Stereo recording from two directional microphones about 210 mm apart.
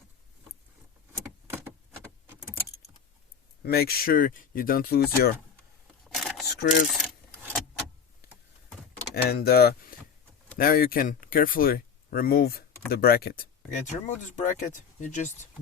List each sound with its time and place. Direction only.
1.5 s a sound: 10° right (ahead or behind)
2.2 s keys jangling: 10° right (ahead or behind)
3.6 s speech: 45° left (ahead or behind)
6.1 s camera: centre (ahead or behind)
6.6 s speech: 60° left (ahead or behind)
6.8 s vehicle: centre (ahead or behind)
9.1 s speech: 50° left (ahead or behind)
13.7 s speech: 35° left (ahead or behind)